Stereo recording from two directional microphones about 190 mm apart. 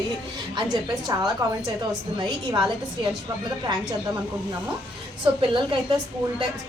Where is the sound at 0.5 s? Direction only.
25° right (ahead or behind).